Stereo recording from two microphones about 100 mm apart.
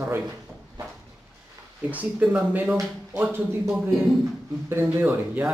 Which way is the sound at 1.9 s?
15° right (ahead or behind).